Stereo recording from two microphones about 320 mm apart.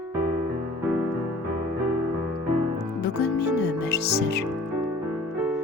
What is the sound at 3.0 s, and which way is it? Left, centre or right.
Music, left.